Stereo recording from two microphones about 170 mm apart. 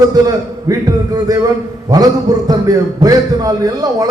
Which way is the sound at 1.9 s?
20° right (ahead or behind).